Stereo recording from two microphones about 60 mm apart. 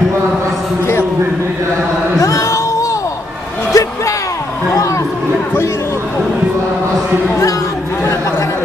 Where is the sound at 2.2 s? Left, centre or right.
Left.